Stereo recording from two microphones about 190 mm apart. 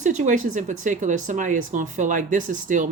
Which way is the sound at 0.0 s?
40° right (ahead or behind).